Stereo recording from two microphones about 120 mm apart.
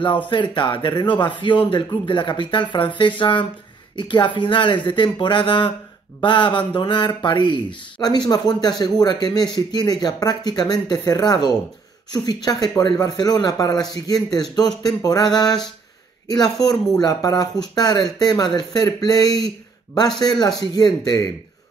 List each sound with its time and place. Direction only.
0.3 s a man's voice: 40° left (ahead or behind)